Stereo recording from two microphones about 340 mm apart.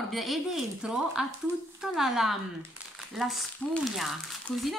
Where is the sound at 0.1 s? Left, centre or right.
Centre.